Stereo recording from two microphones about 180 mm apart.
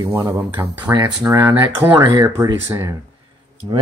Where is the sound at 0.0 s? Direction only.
20° right (ahead or behind).